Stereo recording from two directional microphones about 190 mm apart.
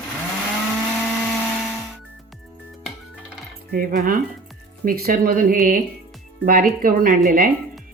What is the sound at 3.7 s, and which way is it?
Speech, 45° right (ahead or behind).